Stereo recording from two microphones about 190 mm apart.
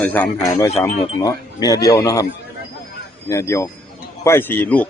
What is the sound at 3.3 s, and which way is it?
A man's voice, 15° left (ahead or behind).